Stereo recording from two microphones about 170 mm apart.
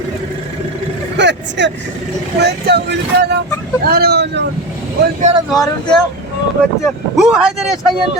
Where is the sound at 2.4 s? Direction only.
75° right (ahead or behind).